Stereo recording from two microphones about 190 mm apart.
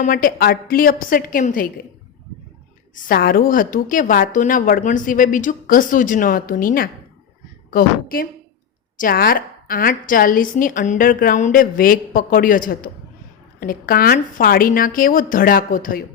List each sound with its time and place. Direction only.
0.0 s a woman's voice: 45° left (ahead or behind)
2.9 s a woman's voice: 45° left (ahead or behind)